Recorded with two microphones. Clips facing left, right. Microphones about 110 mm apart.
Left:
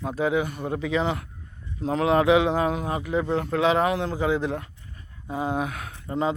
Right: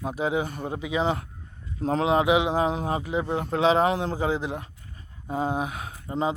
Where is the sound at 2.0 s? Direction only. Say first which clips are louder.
Left 3 dB; 20° right (ahead or behind).